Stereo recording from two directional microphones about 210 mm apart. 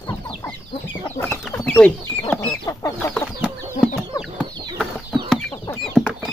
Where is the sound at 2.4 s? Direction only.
15° left (ahead or behind).